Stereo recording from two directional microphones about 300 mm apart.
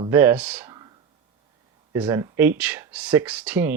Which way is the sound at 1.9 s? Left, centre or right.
Centre.